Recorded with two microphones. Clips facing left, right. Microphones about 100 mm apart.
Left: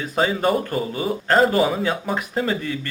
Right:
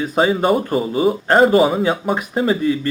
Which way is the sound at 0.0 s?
20° right (ahead or behind).